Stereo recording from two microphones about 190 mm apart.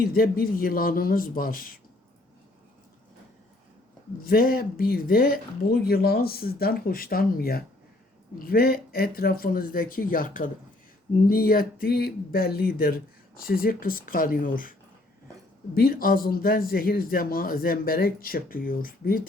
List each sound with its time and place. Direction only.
0.0 s speech: 50° left (ahead or behind)
4.2 s speech: 50° left (ahead or behind)